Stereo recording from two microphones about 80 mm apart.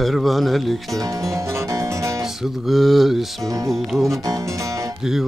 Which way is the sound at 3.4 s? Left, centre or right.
Right.